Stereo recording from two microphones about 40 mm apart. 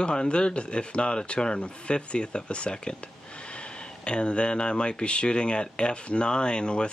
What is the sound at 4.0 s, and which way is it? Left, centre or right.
Speech, left.